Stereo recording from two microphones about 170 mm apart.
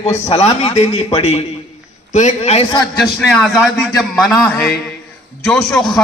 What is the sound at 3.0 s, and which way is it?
A man's voice, centre (ahead or behind).